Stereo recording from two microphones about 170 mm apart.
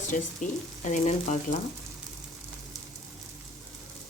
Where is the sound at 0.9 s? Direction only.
45° left (ahead or behind).